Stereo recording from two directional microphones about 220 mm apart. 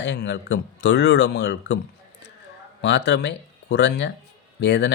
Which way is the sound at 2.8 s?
50° left (ahead or behind).